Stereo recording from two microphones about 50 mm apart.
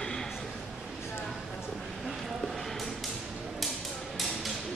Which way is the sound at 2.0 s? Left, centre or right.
Centre.